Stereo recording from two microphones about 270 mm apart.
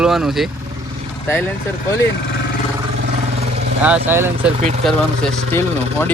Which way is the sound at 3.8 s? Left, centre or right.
Centre.